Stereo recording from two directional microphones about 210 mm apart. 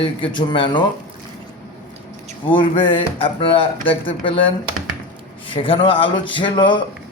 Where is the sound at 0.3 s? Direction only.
25° left (ahead or behind).